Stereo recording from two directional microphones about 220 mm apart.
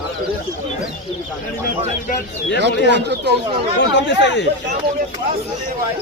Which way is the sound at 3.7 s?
55° left (ahead or behind).